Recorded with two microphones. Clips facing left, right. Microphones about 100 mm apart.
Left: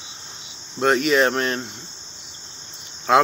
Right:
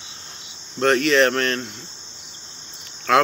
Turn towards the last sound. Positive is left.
turn(degrees=25)  # may be behind; listen again after turning